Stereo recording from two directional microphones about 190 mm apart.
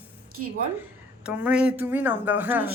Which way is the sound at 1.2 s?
5° right (ahead or behind).